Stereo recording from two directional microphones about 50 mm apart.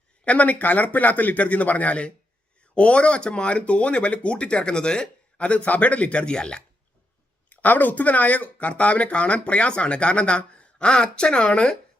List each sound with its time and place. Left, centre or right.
0.3 s a man's voice: left
7.5 s speech: left